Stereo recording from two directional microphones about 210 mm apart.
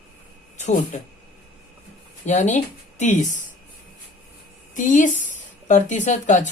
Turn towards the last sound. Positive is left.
turn(degrees=35)  # may be behind; listen again after turning